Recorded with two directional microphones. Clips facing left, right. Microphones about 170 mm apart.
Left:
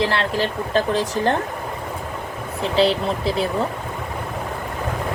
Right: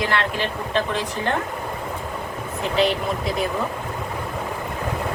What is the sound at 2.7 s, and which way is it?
Speech, 30° left (ahead or behind).